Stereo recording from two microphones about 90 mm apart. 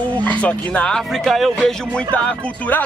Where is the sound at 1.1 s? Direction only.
Centre (ahead or behind).